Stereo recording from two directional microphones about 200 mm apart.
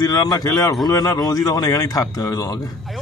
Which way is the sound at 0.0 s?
20° left (ahead or behind).